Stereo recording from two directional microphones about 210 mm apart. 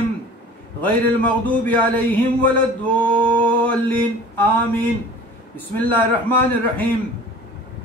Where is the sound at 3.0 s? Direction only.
5° left (ahead or behind).